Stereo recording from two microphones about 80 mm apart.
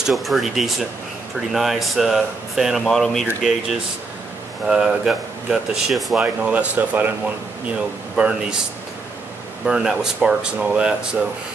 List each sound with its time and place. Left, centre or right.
0.0 s speech: centre
4.6 s speech: centre
6.2 s speech: centre
8.2 s speech: centre
9.7 s speech: centre